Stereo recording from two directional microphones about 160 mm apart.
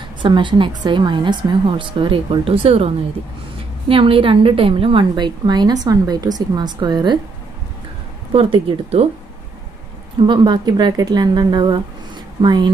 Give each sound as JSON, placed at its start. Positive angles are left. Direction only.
{"t": 0.2, "sound": "a woman's voice", "side_deg": -30}
{"t": 3.9, "sound": "a woman's voice", "side_deg": -35}
{"t": 8.3, "sound": "a woman's voice", "side_deg": -35}
{"t": 10.2, "sound": "a woman's voice", "side_deg": -30}